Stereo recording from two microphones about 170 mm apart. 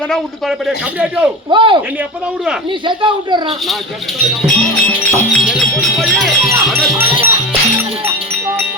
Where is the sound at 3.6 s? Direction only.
Centre (ahead or behind).